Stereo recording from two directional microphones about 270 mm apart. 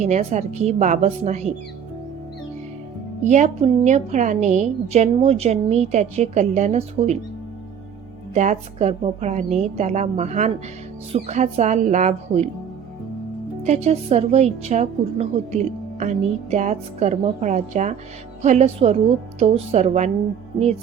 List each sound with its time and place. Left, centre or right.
0.0 s a woman's voice: right
3.2 s a woman's voice: right
8.3 s a woman's voice: right
13.8 s a woman's voice: right